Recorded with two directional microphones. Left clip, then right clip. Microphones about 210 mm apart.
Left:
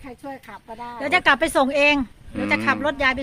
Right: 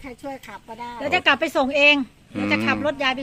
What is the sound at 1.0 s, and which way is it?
Speech, 45° left (ahead or behind).